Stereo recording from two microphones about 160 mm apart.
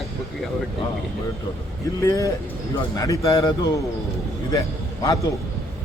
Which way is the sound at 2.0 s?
20° left (ahead or behind).